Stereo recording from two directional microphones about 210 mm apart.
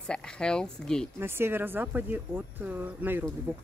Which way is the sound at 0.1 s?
5° left (ahead or behind).